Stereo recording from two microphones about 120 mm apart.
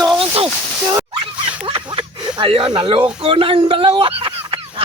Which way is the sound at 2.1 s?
40° right (ahead or behind).